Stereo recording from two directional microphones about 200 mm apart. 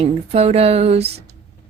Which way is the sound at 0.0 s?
30° right (ahead or behind).